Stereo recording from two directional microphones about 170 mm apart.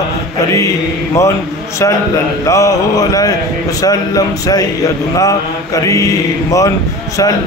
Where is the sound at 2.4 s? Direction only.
20° left (ahead or behind).